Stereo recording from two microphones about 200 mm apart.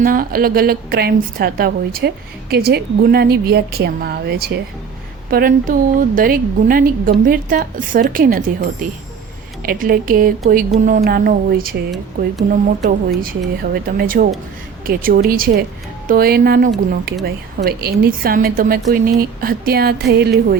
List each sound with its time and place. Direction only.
0.0 s a woman's voice: 45° right (ahead or behind)